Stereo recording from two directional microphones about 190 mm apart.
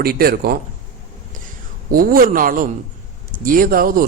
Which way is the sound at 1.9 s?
50° right (ahead or behind).